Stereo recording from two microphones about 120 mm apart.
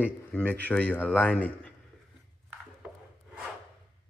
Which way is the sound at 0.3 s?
10° left (ahead or behind).